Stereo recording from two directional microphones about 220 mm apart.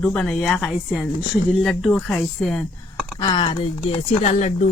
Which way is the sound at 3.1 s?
20° left (ahead or behind).